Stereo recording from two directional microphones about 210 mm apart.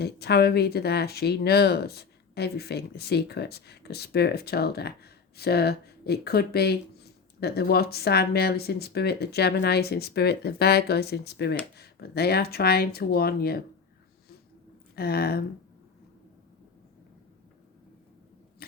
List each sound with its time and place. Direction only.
0.0 s speech: 50° left (ahead or behind)
14.9 s speech: 45° left (ahead or behind)